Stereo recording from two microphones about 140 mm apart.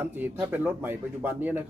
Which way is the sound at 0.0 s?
15° right (ahead or behind).